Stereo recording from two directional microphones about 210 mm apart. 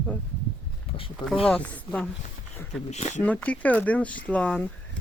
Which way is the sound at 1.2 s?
Centre (ahead or behind).